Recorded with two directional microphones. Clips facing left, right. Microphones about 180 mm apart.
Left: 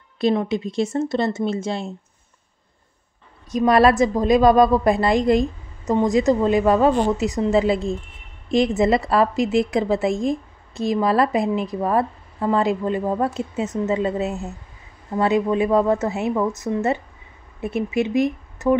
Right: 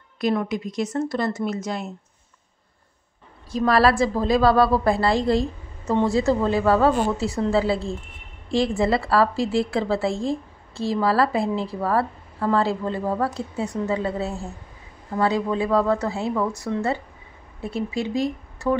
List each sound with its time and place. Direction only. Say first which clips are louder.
0.2 s a woman's voice: left 3 dB; 25° left (ahead or behind)
3.5 s a woman's voice: left 3 dB; 20° left (ahead or behind)